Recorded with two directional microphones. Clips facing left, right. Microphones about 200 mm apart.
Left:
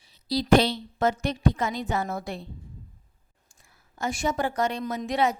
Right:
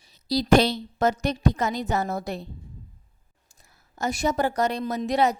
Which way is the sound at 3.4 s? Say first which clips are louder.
Right 1 dB; 40° right (ahead or behind).